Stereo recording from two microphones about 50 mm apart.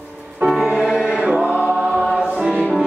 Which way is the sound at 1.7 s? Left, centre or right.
Right.